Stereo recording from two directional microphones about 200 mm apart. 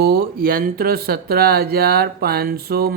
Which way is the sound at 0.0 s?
50° right (ahead or behind).